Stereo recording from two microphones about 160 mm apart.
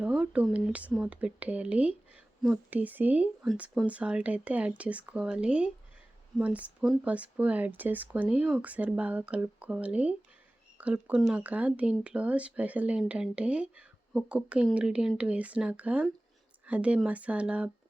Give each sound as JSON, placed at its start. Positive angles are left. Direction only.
{"t": 0.0, "sound": "speech", "side_deg": -5}